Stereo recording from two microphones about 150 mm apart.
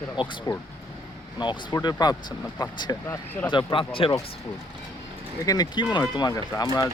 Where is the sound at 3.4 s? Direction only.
35° left (ahead or behind).